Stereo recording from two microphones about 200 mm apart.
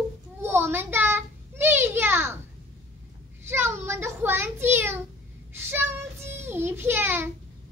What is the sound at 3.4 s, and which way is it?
A child's voice, 10° right (ahead or behind).